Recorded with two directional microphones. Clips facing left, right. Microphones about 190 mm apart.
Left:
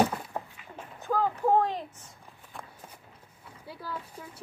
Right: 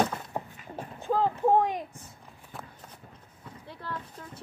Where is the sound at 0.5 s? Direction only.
40° right (ahead or behind).